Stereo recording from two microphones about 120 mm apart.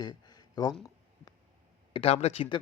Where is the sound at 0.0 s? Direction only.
35° left (ahead or behind).